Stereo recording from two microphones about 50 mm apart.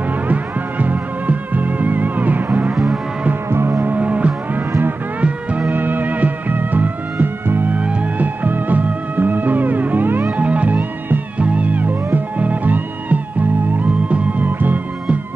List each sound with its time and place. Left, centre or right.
0.3 s music: right
2.7 s moo: centre
3.4 s music: right
3.9 s music: right
5.7 s music: right
7.7 s music: right
10.3 s music: right